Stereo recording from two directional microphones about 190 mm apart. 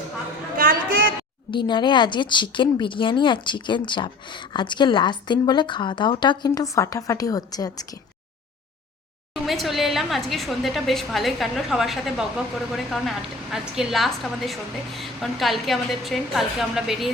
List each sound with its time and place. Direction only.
0.5 s a sound: 50° right (ahead or behind)
1.5 s speech: 25° left (ahead or behind)
9.3 s a woman's voice: centre (ahead or behind)